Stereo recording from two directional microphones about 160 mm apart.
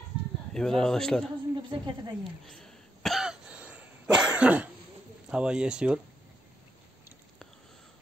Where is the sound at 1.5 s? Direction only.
25° right (ahead or behind).